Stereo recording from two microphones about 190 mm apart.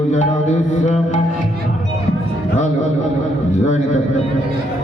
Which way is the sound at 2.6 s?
40° left (ahead or behind).